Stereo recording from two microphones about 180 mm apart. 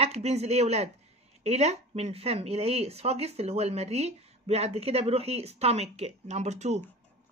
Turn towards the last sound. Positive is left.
turn(degrees=-40)  # may be behind; listen again after turning